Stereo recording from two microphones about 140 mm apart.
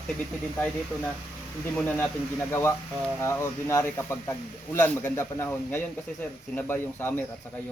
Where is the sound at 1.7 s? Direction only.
10° left (ahead or behind).